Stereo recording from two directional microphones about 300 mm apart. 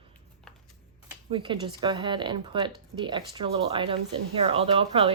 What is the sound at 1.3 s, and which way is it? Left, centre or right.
A woman's voice, centre.